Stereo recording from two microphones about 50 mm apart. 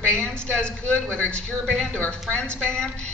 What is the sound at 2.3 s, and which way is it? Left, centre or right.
Speech, centre.